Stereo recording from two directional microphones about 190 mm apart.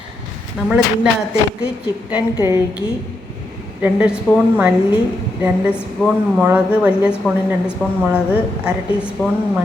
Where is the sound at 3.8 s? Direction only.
5° right (ahead or behind).